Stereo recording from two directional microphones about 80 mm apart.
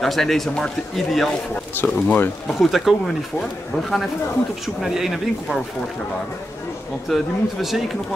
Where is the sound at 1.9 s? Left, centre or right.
Left.